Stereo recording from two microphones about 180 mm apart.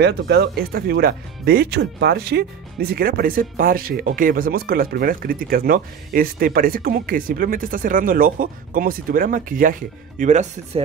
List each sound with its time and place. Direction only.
0.0 s speech: 65° right (ahead or behind); by 10.8 s 40° right (ahead or behind)